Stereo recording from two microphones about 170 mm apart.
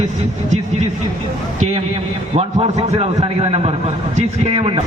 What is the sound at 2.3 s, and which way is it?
A man's voice, 35° right (ahead or behind).